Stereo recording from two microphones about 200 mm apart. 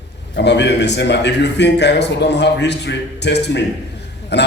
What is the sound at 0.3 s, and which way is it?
A man's voice, 60° left (ahead or behind).